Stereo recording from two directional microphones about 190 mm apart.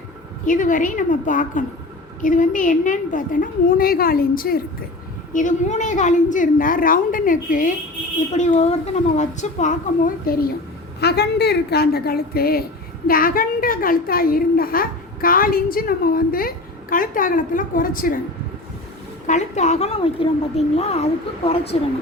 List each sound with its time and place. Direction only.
0.4 s a woman's voice: 45° left (ahead or behind)
10.3 s a woman's voice: 50° left (ahead or behind)
19.3 s speech: 40° left (ahead or behind)